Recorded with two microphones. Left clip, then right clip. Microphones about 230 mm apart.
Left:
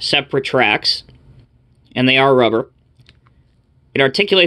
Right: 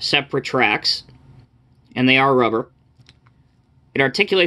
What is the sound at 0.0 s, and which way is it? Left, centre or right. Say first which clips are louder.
Speech: left 3 dB; centre.